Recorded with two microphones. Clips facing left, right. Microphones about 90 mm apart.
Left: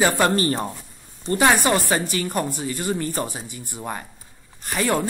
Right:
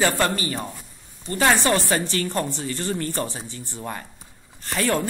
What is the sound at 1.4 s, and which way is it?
A woman's voice, 15° left (ahead or behind).